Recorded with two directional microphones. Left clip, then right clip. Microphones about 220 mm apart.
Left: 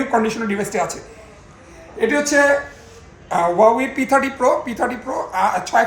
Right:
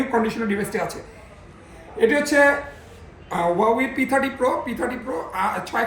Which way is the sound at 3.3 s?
25° left (ahead or behind).